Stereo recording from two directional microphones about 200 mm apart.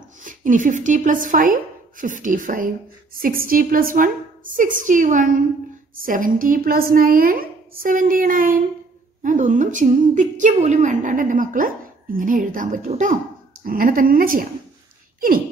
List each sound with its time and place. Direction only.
0.2 s a woman's voice: 40° right (ahead or behind)